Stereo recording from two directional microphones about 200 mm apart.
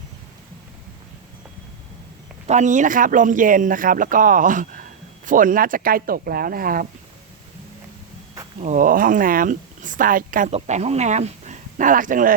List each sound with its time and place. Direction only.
2.5 s speech: 35° right (ahead or behind)
8.6 s a woman's voice: 40° right (ahead or behind)